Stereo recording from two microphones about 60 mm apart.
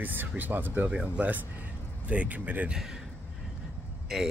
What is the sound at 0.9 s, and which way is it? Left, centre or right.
Speech, centre.